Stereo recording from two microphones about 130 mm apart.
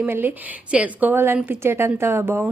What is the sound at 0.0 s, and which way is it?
Speech, 15° right (ahead or behind).